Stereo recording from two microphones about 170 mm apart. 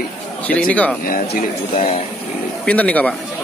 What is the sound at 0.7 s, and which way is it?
Speech, 10° left (ahead or behind).